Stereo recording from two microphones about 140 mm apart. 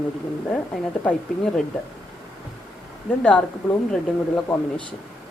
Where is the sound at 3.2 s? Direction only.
10° left (ahead or behind).